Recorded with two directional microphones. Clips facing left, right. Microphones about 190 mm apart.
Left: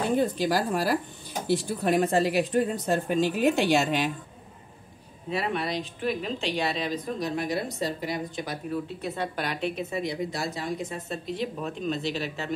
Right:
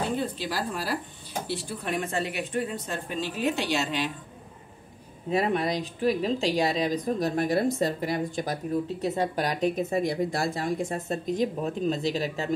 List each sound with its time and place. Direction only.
0.4 s speech: 45° left (ahead or behind)
5.3 s a woman's voice: 45° right (ahead or behind)